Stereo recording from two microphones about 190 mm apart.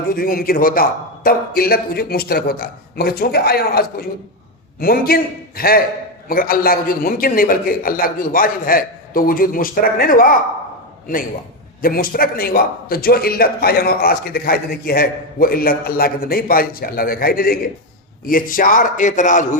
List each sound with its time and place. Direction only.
0.1 s a man's voice: 50° left (ahead or behind)
11.8 s a man's voice: 50° left (ahead or behind)